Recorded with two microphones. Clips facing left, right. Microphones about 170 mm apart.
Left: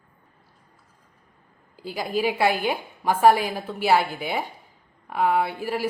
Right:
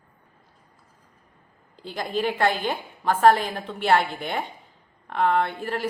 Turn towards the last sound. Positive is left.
turn(degrees=10)  # may be behind; listen again after turning